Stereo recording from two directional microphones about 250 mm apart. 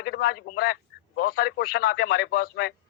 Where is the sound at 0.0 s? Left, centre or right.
Left.